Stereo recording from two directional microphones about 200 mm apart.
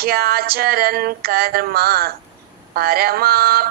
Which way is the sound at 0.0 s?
50° right (ahead or behind).